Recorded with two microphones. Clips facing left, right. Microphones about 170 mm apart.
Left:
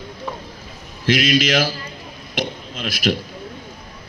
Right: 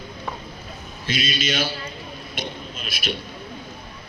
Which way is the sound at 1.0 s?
90° left.